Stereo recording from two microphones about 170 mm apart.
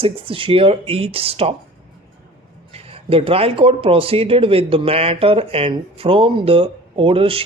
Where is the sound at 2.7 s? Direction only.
35° right (ahead or behind).